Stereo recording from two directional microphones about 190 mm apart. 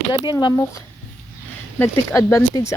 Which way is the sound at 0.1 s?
25° left (ahead or behind).